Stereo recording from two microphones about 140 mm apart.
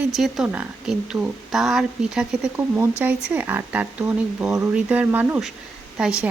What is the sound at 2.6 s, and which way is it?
Speech, 15° right (ahead or behind).